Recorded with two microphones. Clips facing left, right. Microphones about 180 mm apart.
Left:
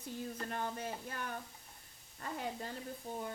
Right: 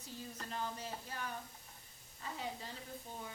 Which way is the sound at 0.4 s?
55° left (ahead or behind).